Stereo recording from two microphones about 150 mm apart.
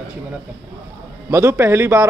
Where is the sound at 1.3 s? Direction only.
20° right (ahead or behind).